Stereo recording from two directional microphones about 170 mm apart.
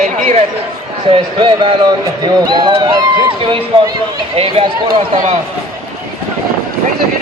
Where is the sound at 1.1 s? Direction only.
30° right (ahead or behind).